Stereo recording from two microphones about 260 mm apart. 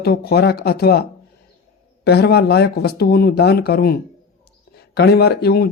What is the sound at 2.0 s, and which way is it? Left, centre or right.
A man's voice, left.